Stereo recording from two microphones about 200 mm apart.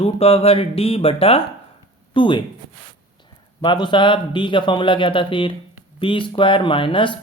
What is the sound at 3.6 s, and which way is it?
Speech, 20° left (ahead or behind).